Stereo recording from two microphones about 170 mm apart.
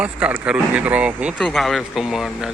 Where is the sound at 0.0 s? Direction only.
10° right (ahead or behind).